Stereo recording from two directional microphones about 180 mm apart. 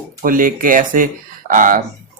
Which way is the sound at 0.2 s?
50° right (ahead or behind).